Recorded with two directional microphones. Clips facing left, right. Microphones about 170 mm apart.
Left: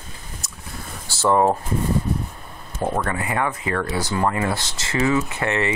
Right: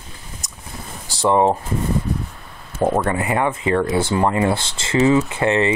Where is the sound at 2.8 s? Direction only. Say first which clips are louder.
Right 5 dB; 30° right (ahead or behind).